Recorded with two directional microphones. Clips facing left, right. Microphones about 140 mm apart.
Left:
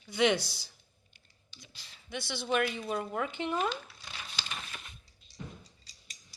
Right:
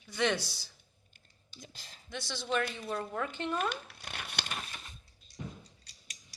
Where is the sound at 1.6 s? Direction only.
45° right (ahead or behind).